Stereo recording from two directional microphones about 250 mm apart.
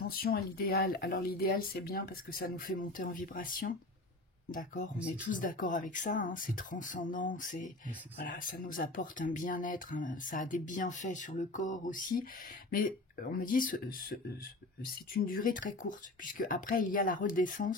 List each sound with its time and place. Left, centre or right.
0.0 s speech: left
15.2 s speech: left